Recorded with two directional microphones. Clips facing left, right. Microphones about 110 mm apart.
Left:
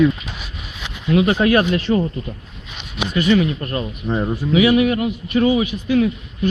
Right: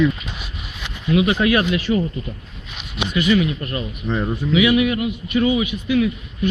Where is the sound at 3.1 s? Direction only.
40° left (ahead or behind).